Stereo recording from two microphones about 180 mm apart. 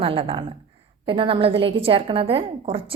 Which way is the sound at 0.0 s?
30° right (ahead or behind).